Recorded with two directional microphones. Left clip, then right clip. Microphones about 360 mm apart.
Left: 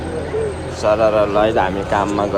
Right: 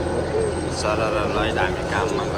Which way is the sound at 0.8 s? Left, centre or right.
Centre.